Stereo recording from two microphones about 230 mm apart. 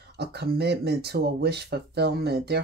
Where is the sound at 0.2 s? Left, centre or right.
Right.